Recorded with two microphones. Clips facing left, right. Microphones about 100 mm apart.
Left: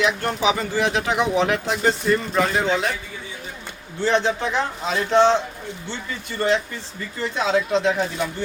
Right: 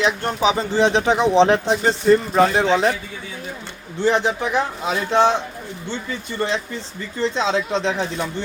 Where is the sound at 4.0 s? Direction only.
15° right (ahead or behind).